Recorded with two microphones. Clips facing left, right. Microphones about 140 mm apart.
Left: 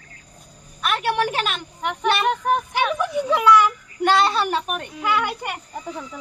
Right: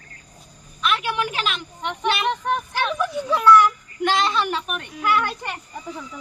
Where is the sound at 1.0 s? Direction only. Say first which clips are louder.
Left 4 dB; 55° left (ahead or behind).